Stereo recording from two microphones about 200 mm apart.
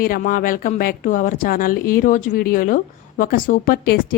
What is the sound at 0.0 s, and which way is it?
Speech, 45° left (ahead or behind).